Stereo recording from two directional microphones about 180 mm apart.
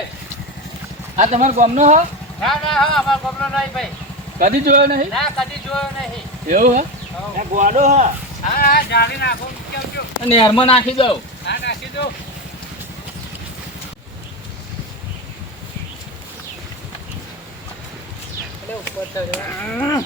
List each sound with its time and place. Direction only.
1.1 s speech: 40° right (ahead or behind)
2.4 s speech: centre (ahead or behind)
4.4 s speech: 50° right (ahead or behind)
5.1 s speech: centre (ahead or behind)
6.5 s speech: 45° right (ahead or behind)
8.5 s speech: 60° left (ahead or behind)
10.2 s a man's voice: 30° left (ahead or behind)
11.4 s speech: 70° left (ahead or behind)
19.5 s cattle: 10° left (ahead or behind)